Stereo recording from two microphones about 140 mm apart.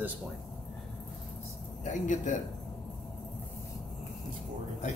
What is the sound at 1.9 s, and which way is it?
Speech, 65° left (ahead or behind).